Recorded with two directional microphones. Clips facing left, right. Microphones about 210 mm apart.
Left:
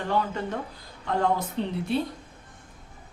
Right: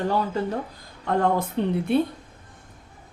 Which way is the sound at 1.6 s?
55° right (ahead or behind).